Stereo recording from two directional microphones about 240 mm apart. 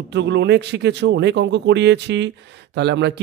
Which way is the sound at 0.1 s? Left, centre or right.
Right.